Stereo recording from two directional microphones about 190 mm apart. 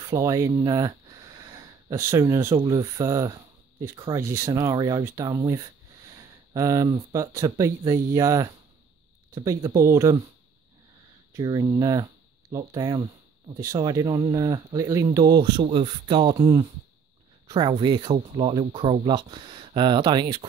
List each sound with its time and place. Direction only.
0.0 s speech: 20° right (ahead or behind)
11.3 s speech: 20° right (ahead or behind)